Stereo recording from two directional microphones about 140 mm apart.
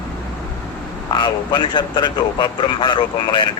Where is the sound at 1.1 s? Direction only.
35° left (ahead or behind).